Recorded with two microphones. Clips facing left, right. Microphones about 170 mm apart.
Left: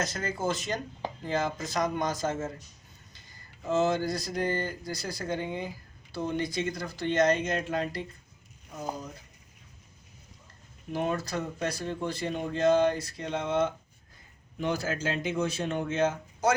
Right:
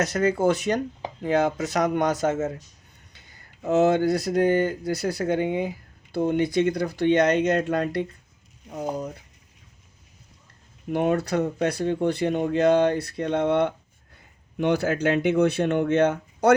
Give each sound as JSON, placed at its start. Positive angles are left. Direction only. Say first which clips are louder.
{"t": 0.0, "sound": "speech", "louder": "right 10 dB", "side_deg": -65}
{"t": 3.1, "sound": "a sound", "louder": "right 2 dB", "side_deg": -65}
{"t": 3.7, "sound": "speech", "louder": "right 7 dB", "side_deg": -65}
{"t": 10.9, "sound": "speech", "louder": "right 8 dB", "side_deg": -65}